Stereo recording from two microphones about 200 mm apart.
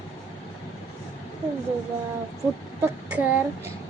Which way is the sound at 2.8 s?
10° right (ahead or behind).